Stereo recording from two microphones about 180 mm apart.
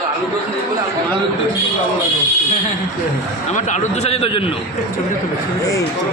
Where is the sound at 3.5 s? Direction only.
40° left (ahead or behind).